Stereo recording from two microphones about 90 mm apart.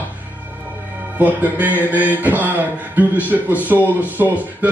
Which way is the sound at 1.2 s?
20° right (ahead or behind).